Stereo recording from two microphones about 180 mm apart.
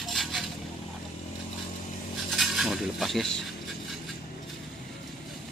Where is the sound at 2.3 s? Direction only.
Centre (ahead or behind).